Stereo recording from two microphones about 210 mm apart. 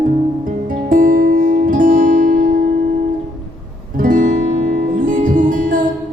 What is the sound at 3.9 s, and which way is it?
Music, 40° right (ahead or behind).